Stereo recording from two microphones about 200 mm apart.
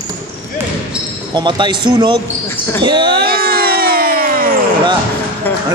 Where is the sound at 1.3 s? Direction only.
20° right (ahead or behind).